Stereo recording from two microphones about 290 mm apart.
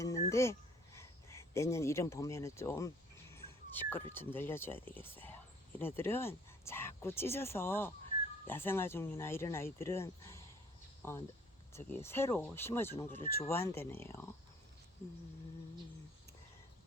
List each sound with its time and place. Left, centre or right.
0.0 s a sound: centre
0.9 s speech: centre
3.3 s dog: centre
4.1 s speech: centre